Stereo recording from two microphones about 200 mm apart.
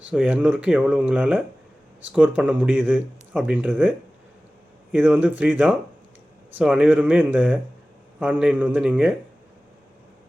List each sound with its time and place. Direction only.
0.1 s speech: 5° right (ahead or behind)